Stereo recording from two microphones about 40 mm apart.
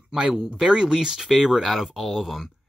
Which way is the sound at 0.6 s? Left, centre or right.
Centre.